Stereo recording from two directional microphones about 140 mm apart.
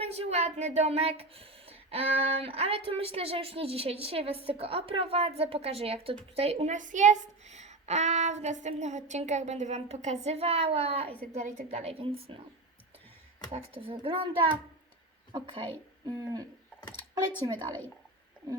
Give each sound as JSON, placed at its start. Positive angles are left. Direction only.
{"t": 0.0, "sound": "speech", "side_deg": -50}
{"t": 13.9, "sound": "a child's voice", "side_deg": -40}
{"t": 16.0, "sound": "hoot", "side_deg": -30}
{"t": 17.4, "sound": "a child's voice", "side_deg": -30}